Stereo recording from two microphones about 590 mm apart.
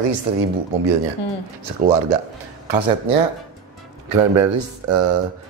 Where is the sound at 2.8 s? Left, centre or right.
Right.